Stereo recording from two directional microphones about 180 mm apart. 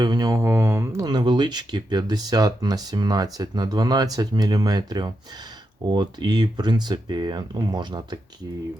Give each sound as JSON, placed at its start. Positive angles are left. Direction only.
{"t": 0.0, "sound": "speech", "side_deg": -20}